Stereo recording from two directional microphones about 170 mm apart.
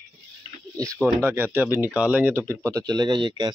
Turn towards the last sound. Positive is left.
turn(degrees=-25)  # may be behind; listen again after turning